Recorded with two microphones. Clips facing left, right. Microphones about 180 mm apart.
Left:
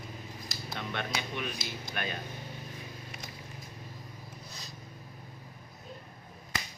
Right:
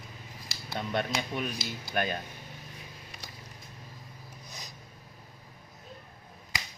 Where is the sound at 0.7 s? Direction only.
40° right (ahead or behind).